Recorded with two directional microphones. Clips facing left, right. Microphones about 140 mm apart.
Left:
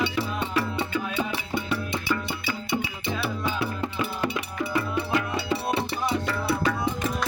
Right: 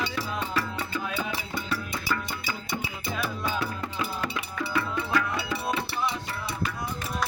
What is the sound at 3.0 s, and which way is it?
Music, 40° right (ahead or behind).